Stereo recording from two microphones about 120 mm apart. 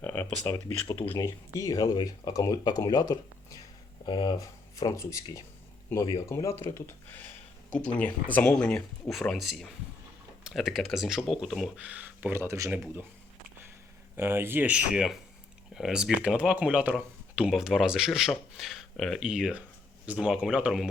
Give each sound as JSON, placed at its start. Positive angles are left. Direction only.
{"t": 0.0, "sound": "a sound", "side_deg": 15}
{"t": 0.4, "sound": "speech", "side_deg": 30}
{"t": 0.9, "sound": "speech", "side_deg": 20}
{"t": 11.8, "sound": "speech", "side_deg": -10}
{"t": 14.2, "sound": "speech", "side_deg": -20}
{"t": 17.0, "sound": "a sound", "side_deg": -10}
{"t": 17.5, "sound": "speech", "side_deg": -5}